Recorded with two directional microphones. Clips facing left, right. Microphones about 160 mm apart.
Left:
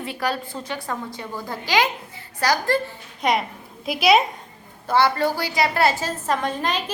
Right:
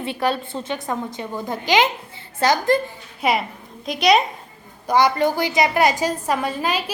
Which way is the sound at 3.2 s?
5° right (ahead or behind).